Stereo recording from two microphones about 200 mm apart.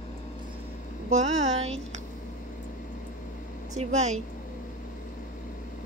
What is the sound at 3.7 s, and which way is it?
Speech, 35° right (ahead or behind).